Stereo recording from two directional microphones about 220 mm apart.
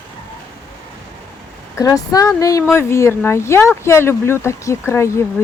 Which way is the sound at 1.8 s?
15° left (ahead or behind).